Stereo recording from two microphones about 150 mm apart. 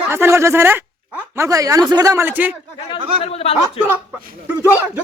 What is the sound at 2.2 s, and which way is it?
Speech, 10° right (ahead or behind).